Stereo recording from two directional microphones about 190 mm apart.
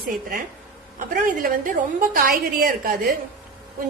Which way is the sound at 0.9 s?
45° right (ahead or behind).